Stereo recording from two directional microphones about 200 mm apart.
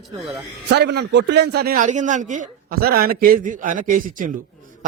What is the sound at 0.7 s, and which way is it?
Speech, 60° right (ahead or behind).